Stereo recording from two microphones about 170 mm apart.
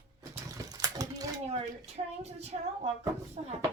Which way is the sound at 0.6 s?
20° right (ahead or behind).